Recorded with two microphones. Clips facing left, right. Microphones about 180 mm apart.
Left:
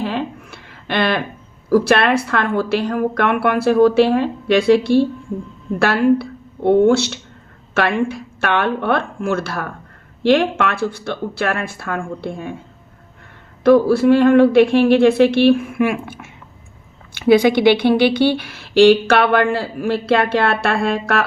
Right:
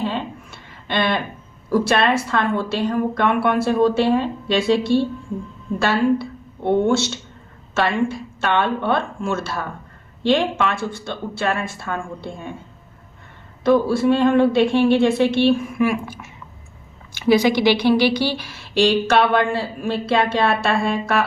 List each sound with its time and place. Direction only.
0.0 s a sound: 70° left (ahead or behind)
1.7 s speech: 65° left (ahead or behind)
13.7 s speech: 60° left (ahead or behind)